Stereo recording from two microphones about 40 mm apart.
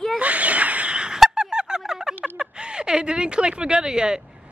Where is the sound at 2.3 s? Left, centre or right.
Right.